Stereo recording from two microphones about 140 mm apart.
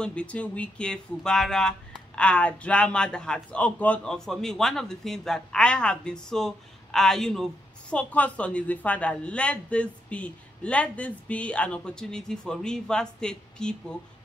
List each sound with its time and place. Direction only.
0.0 s speech: 10° left (ahead or behind)